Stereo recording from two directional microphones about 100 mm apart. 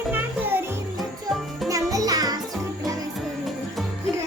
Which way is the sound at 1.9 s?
40° right (ahead or behind).